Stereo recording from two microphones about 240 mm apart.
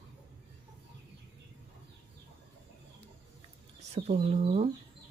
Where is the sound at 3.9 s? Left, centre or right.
Right.